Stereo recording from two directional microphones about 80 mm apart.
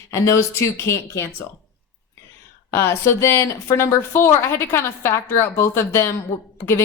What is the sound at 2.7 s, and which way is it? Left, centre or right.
A woman's voice, left.